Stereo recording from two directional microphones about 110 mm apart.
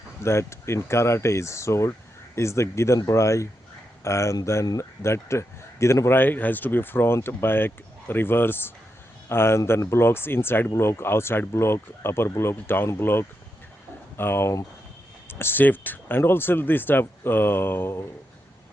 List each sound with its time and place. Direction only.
0.2 s speech: 25° left (ahead or behind)